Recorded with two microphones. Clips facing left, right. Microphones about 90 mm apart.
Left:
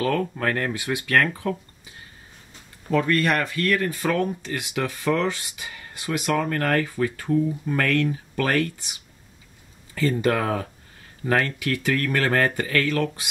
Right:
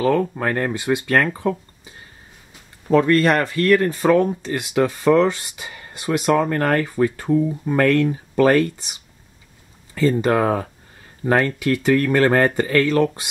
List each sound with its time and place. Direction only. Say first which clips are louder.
0.0 s speech: right 5 dB; 15° right (ahead or behind)
2.9 s speech: right 6 dB; 25° right (ahead or behind)
9.9 s speech: right 5 dB; 25° right (ahead or behind)